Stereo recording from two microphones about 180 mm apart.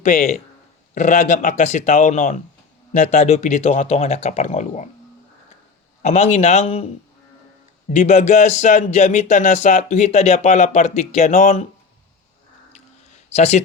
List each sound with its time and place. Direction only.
0.0 s a man's voice: 40° left (ahead or behind)
6.0 s a man's voice: 40° left (ahead or behind)
7.9 s a man's voice: 40° left (ahead or behind)
12.7 s a sound: 40° left (ahead or behind)